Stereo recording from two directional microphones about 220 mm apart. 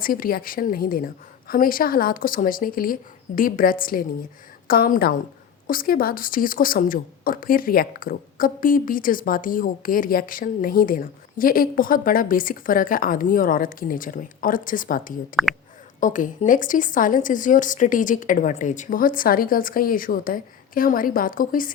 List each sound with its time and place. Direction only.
0.0 s a woman's voice: 40° left (ahead or behind)